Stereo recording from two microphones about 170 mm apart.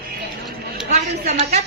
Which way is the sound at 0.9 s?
40° right (ahead or behind).